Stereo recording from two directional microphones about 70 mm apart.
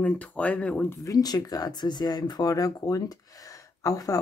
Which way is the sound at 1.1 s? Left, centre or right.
Left.